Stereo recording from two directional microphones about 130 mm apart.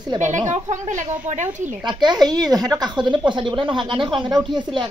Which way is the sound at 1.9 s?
35° right (ahead or behind).